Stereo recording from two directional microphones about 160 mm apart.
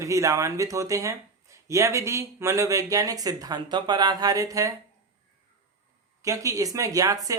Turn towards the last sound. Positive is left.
turn(degrees=-20)  # may be behind; listen again after turning